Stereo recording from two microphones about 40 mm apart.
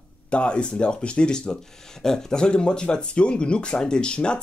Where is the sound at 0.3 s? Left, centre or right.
Left.